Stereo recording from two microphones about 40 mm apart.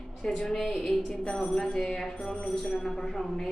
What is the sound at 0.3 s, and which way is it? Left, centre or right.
Speech, centre.